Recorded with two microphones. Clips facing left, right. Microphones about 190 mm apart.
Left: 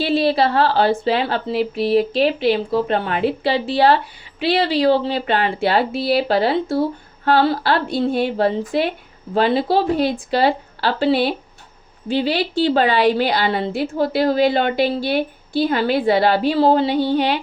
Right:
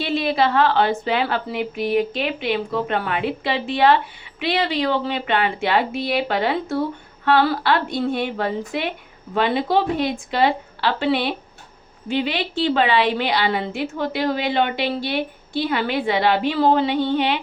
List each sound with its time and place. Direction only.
0.0 s speech: 35° left (ahead or behind)